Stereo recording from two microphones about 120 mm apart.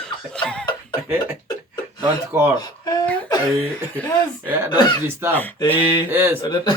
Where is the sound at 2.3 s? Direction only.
20° right (ahead or behind).